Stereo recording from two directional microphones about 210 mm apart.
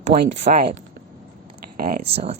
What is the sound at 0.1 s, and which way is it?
Speech, 40° right (ahead or behind).